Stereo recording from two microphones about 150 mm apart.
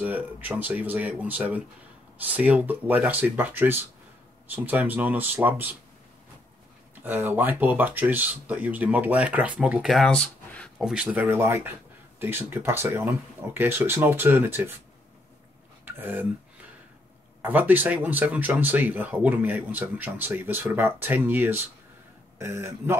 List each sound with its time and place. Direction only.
0.0 s speech: 10° right (ahead or behind)
7.0 s speech: 15° right (ahead or behind); by 10.9 s 5° left (ahead or behind)
10.9 s speech: 5° right (ahead or behind)
11.2 s speech: 15° right (ahead or behind)
15.8 s a sound: 15° right (ahead or behind)
17.4 s speech: 10° right (ahead or behind)